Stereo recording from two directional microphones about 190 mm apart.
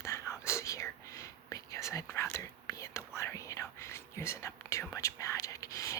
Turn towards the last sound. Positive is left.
turn(degrees=15)  # may be behind; listen again after turning